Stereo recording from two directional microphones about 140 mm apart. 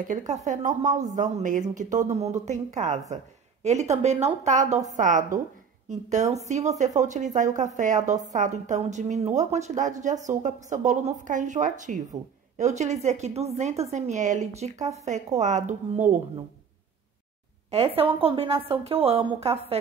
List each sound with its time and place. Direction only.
0.5 s a woman's voice: 65° right (ahead or behind)
4.9 s a woman's voice: 70° right (ahead or behind)
17.6 s a woman's voice: 45° right (ahead or behind)